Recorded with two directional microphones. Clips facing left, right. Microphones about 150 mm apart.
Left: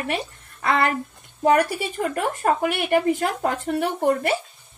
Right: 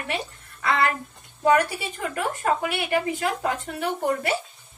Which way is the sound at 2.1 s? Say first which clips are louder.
Left 1 dB; 50° left (ahead or behind).